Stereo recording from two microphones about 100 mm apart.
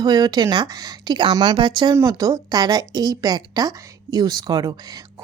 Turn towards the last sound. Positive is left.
turn(degrees=-40)  # may be behind; listen again after turning